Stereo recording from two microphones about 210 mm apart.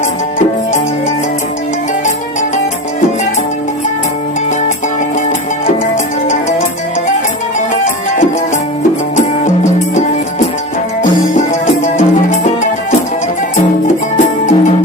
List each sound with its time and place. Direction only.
11.3 s music: 35° left (ahead or behind)
13.8 s music: 35° left (ahead or behind)